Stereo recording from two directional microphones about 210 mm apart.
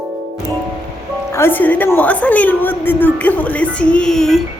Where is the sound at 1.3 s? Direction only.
10° left (ahead or behind).